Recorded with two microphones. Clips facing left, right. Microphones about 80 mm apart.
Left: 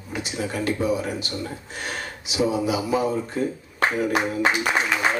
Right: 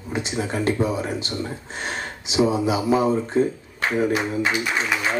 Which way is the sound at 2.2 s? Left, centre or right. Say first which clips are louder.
Right 3 dB; right.